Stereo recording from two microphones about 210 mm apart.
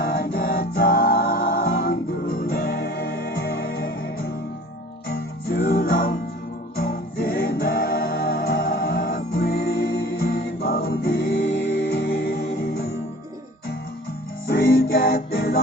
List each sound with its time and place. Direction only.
0.0 s music: 45° left (ahead or behind)
14.4 s music: 45° left (ahead or behind)